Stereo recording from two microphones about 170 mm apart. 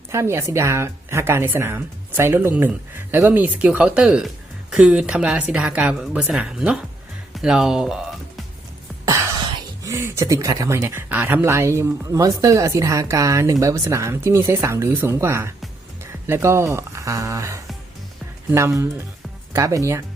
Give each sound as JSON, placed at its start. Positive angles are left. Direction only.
{"t": 0.1, "sound": "a woman's voice", "side_deg": -15}
{"t": 9.0, "sound": "a sound", "side_deg": -15}
{"t": 9.8, "sound": "speech", "side_deg": -15}